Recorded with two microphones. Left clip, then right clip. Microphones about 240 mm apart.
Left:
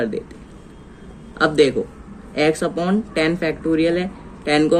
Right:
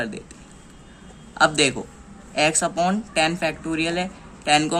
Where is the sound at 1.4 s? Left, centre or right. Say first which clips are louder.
Left 3 dB; right.